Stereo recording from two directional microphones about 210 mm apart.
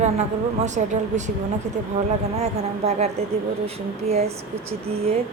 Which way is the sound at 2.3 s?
30° right (ahead or behind).